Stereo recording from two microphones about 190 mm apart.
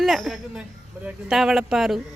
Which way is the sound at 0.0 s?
Centre (ahead or behind).